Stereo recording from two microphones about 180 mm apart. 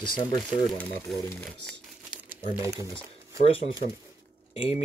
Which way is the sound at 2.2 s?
15° right (ahead or behind).